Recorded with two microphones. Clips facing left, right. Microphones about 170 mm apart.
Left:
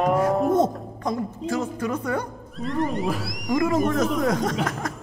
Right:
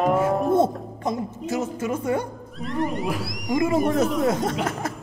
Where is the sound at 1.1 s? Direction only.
25° right (ahead or behind).